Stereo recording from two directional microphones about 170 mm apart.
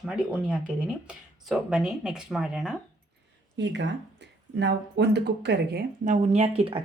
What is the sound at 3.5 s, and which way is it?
Speech, 90° right.